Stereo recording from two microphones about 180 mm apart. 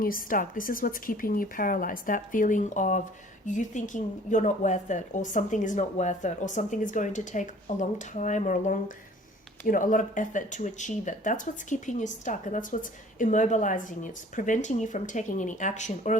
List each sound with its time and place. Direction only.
0.0 s speech: 50° left (ahead or behind)